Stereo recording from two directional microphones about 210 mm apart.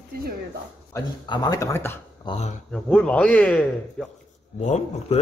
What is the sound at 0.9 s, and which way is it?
Speech, 20° left (ahead or behind).